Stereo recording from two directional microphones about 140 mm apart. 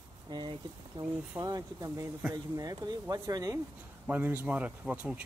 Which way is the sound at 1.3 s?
25° right (ahead or behind).